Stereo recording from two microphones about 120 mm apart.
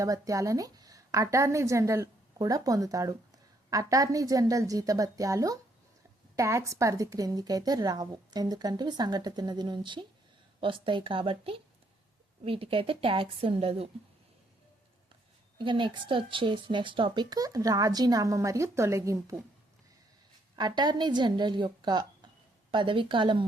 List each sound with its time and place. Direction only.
0.0 s a woman's voice: 25° right (ahead or behind); by 13.8 s 55° right (ahead or behind)
15.5 s speech: 40° right (ahead or behind); by 19.4 s 25° right (ahead or behind)
20.6 s a woman's voice: 35° right (ahead or behind)